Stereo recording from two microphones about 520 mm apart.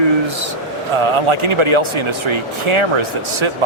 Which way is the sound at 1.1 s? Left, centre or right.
Right.